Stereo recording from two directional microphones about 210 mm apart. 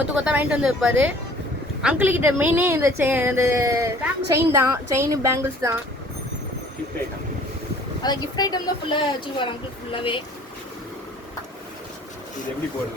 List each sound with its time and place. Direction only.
0.3 s a woman's voice: 5° right (ahead or behind)
8.0 s speech: 20° left (ahead or behind)